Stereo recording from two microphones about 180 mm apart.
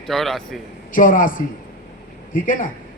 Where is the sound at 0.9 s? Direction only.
50° left (ahead or behind).